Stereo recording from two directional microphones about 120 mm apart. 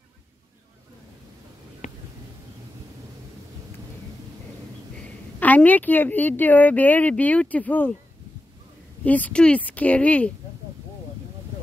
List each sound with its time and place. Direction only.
1.8 s a sound: 80° left
5.0 s a woman's voice: 15° left (ahead or behind)
9.0 s a woman's voice: 15° left (ahead or behind)